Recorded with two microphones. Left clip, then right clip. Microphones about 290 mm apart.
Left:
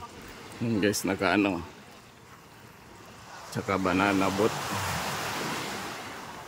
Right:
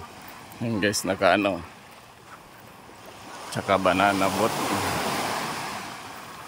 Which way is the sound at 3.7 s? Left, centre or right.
Centre.